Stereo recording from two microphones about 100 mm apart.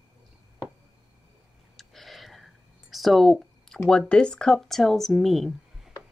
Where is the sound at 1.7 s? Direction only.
Centre (ahead or behind).